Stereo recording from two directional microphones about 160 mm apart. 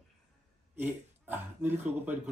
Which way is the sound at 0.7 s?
10° right (ahead or behind).